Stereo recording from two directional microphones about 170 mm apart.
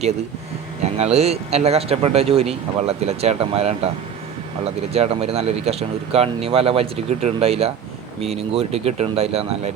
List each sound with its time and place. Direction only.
0.8 s speech: 40° right (ahead or behind)